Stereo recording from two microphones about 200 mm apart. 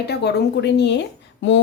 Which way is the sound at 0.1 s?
55° left (ahead or behind).